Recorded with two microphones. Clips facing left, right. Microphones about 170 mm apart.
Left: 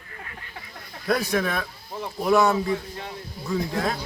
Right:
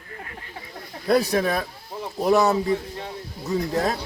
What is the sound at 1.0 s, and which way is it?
Speech, 30° right (ahead or behind).